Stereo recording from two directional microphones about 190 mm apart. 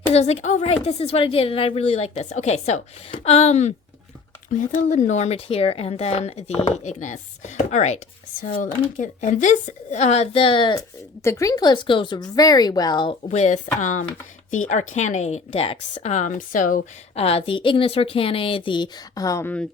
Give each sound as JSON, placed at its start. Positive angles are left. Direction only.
{"t": 0.1, "sound": "a woman's voice", "side_deg": 35}
{"t": 13.2, "sound": "a woman's voice", "side_deg": 35}
{"t": 17.2, "sound": "speech", "side_deg": 30}